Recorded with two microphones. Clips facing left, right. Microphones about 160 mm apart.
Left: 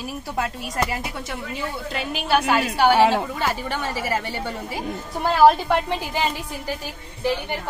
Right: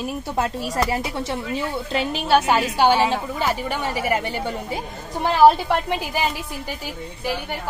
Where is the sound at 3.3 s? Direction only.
10° right (ahead or behind).